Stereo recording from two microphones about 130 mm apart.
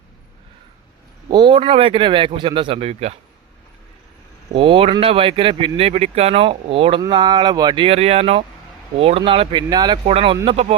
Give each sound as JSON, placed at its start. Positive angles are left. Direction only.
{"t": 1.3, "sound": "speech", "side_deg": -35}
{"t": 1.5, "sound": "speech", "side_deg": -45}
{"t": 4.5, "sound": "speech", "side_deg": -45}
{"t": 7.9, "sound": "speech", "side_deg": -50}
{"t": 10.1, "sound": "speech", "side_deg": -50}